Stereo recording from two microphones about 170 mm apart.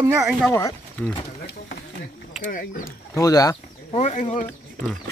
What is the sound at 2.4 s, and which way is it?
Speech, 50° left (ahead or behind).